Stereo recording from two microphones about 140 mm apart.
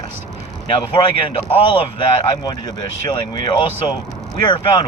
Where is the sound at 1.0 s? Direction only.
30° left (ahead or behind).